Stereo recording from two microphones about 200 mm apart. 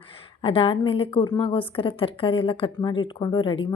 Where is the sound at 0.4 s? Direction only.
25° left (ahead or behind).